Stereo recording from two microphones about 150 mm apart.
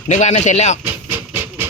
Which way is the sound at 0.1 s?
50° left (ahead or behind).